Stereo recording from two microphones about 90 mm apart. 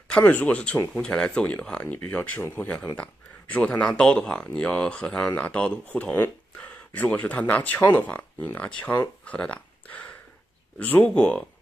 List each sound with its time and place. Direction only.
0.1 s speech: 20° left (ahead or behind)
9.2 s a sound: 15° left (ahead or behind)
10.8 s speech: 15° left (ahead or behind)